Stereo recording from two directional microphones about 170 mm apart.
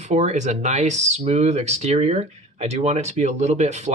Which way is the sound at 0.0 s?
45° right (ahead or behind).